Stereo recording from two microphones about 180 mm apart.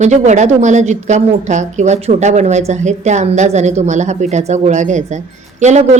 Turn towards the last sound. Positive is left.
turn(degrees=-40)  # may be behind; listen again after turning